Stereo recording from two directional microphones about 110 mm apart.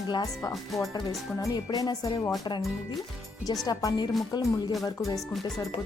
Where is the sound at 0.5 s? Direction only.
Centre (ahead or behind).